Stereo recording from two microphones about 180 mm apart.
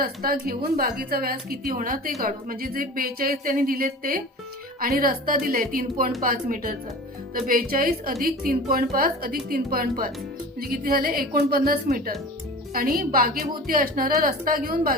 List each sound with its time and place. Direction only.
0.0 s a woman's voice: 55° right (ahead or behind)